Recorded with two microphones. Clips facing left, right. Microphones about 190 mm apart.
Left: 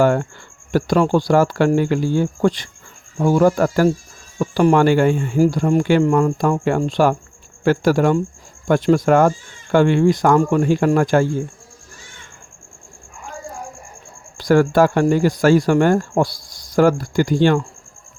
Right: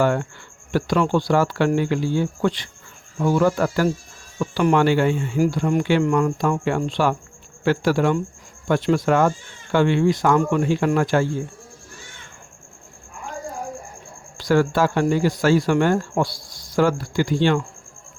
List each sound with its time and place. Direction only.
0.0 s speech: 45° left (ahead or behind)
14.3 s speech: 50° left (ahead or behind)